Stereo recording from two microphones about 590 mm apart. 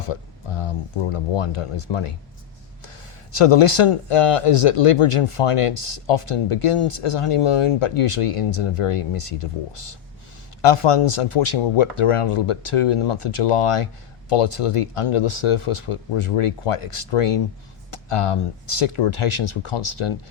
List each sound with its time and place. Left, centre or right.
0.0 s speech: left
3.3 s speech: left